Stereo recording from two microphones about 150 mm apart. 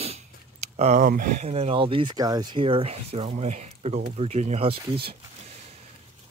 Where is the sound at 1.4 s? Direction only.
45° right (ahead or behind).